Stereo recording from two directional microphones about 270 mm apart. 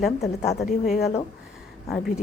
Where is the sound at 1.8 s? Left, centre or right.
Centre.